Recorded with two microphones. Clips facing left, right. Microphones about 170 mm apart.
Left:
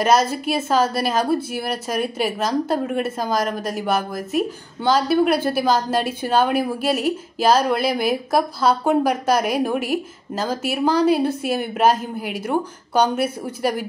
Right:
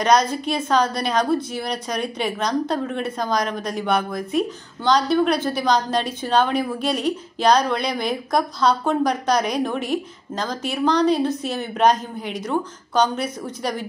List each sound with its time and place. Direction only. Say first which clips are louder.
0.0 s a woman's voice: left 1 dB; 5° left (ahead or behind)